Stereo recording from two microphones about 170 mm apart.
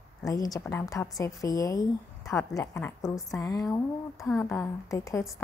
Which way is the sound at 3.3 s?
20° left (ahead or behind).